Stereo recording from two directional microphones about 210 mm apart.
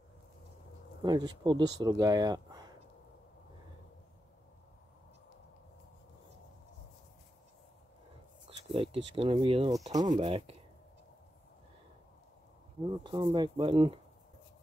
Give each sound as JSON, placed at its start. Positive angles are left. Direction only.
{"t": 1.0, "sound": "speech", "side_deg": -20}
{"t": 8.5, "sound": "speech", "side_deg": -25}
{"t": 13.0, "sound": "speech", "side_deg": -20}